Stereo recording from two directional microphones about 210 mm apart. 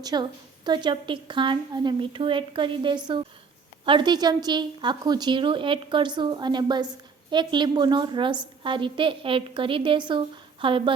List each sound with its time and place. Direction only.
0.0 s a woman's voice: 20° right (ahead or behind)